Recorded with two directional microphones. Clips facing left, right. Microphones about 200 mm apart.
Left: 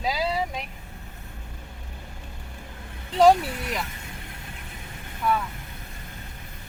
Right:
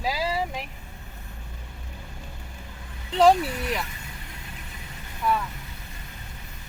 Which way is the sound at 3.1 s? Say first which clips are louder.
Left 1 dB; centre (ahead or behind).